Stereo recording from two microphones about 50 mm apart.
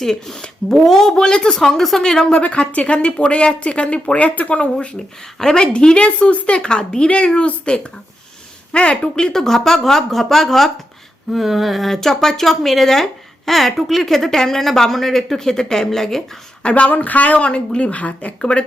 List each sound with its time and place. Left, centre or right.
0.0 s speech: centre
2.4 s speech: left; by 16.2 s centre
16.6 s speech: left